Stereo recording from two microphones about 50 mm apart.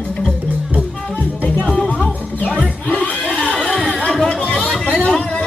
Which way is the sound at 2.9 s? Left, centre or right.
Left.